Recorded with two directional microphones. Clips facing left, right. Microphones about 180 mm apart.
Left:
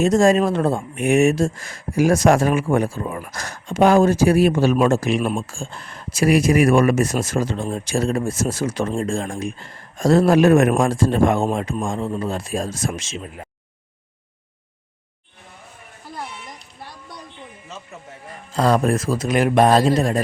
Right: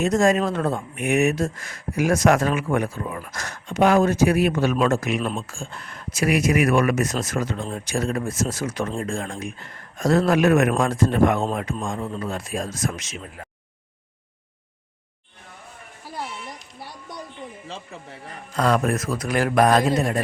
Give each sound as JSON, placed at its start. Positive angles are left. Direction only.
{"t": 0.0, "sound": "speech", "side_deg": 30}
{"t": 5.2, "sound": "speech", "side_deg": 10}
{"t": 5.5, "sound": "speech", "side_deg": 30}
{"t": 18.5, "sound": "speech", "side_deg": 30}